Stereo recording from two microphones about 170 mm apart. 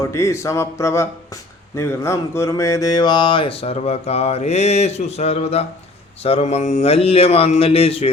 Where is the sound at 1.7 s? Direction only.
15° left (ahead or behind).